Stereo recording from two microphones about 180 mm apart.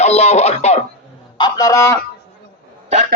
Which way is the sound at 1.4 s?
20° left (ahead or behind).